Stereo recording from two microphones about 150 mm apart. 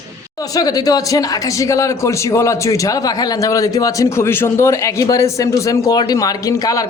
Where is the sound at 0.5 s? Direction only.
25° left (ahead or behind).